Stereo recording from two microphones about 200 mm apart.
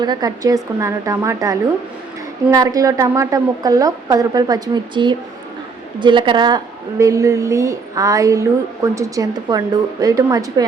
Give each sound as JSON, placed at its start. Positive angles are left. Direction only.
{"t": 0.0, "sound": "a woman's voice", "side_deg": -20}